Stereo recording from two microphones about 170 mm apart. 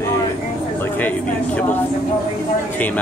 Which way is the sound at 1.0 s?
10° left (ahead or behind).